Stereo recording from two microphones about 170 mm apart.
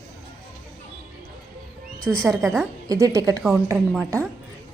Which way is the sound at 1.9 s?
5° left (ahead or behind).